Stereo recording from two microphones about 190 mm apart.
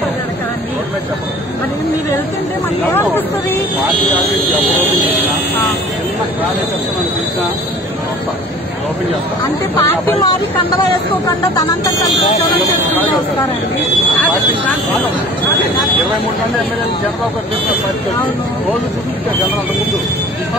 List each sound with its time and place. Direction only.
2.9 s a sound: 15° left (ahead or behind)
9.8 s speech: 20° left (ahead or behind)
11.5 s music: 20° left (ahead or behind)